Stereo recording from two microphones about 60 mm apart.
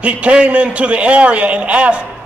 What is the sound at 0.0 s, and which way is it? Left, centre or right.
A man's voice, right.